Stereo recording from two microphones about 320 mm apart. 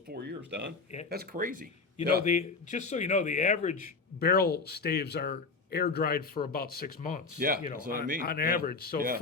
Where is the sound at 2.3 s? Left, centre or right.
Left.